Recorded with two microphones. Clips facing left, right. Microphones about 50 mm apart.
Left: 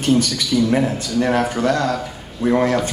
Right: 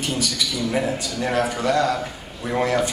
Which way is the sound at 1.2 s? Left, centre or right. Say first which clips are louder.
Left 7 dB; centre.